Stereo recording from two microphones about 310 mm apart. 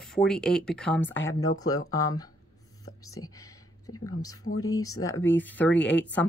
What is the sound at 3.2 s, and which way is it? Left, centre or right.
Speech, left.